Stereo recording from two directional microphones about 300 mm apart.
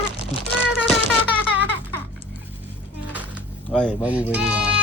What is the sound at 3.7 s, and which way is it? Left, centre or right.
Speech, centre.